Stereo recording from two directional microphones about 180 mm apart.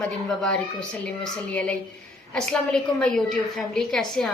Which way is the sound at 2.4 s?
5° left (ahead or behind).